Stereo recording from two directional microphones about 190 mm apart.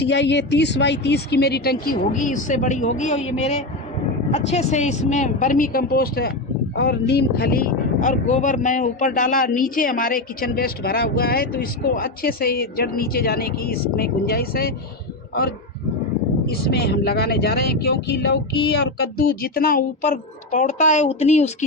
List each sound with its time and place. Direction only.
0.0 s speech: 65° left (ahead or behind)
16.5 s speech: 55° left (ahead or behind); by 21.5 s 35° left (ahead or behind)